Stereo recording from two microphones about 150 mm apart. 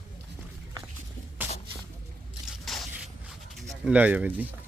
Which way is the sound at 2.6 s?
Centre (ahead or behind).